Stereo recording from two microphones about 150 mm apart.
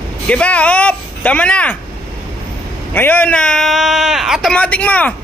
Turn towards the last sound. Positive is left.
turn(degrees=10)  # may be behind; listen again after turning